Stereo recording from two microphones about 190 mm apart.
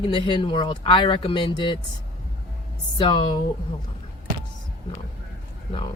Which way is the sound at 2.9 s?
25° left (ahead or behind).